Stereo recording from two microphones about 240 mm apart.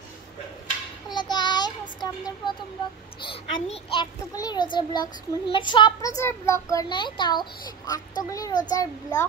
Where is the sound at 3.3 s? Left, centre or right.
Left.